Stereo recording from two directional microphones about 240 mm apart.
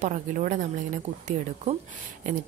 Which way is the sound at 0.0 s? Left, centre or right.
Right.